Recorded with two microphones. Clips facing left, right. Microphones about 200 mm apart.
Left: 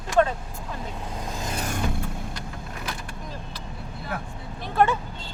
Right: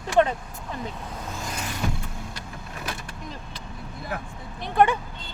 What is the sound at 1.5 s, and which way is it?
Vehicle, 45° left (ahead or behind).